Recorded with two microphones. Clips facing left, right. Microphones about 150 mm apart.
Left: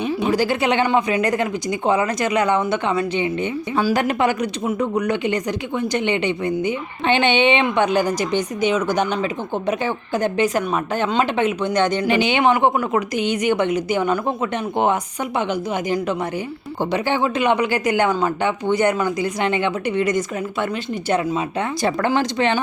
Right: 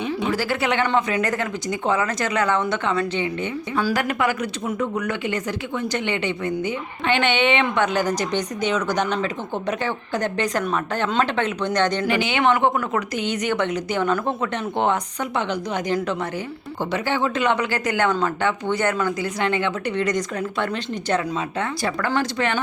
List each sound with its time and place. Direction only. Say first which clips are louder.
0.2 s speech: left 6 dB; 20° left (ahead or behind)
15.4 s speech: left 3 dB; 10° left (ahead or behind)
21.8 s speech: left 5 dB; 20° left (ahead or behind)